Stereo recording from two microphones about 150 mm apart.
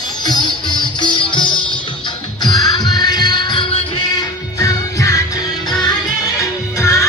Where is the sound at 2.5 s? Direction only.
30° left (ahead or behind).